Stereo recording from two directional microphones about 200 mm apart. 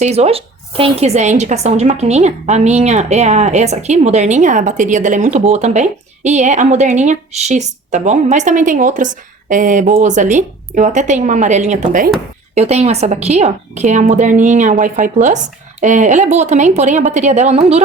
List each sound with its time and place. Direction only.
0.0 s speech: 30° right (ahead or behind)